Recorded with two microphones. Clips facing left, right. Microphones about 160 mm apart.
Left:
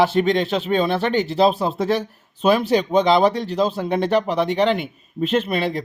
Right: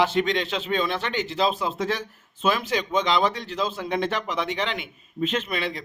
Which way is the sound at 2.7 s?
40° left (ahead or behind).